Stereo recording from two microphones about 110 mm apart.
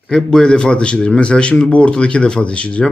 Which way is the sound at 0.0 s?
5° left (ahead or behind).